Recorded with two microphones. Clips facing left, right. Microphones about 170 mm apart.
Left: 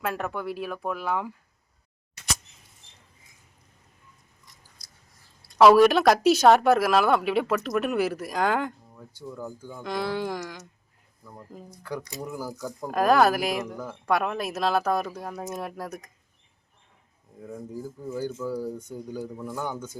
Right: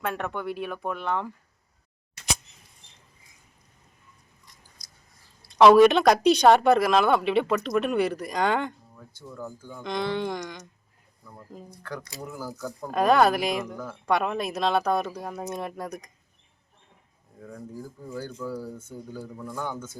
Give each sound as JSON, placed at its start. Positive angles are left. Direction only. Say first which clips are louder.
{"t": 0.0, "sound": "speech", "louder": "even", "side_deg": 0}
{"t": 5.5, "sound": "speech", "louder": "right 1 dB", "side_deg": 0}
{"t": 11.8, "sound": "speech", "louder": "left 4 dB", "side_deg": 10}
{"t": 12.9, "sound": "speech", "louder": "even", "side_deg": 0}
{"t": 17.5, "sound": "speech", "louder": "left 3 dB", "side_deg": 20}